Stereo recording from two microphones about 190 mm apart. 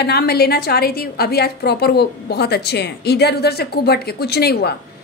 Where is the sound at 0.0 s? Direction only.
55° left (ahead or behind).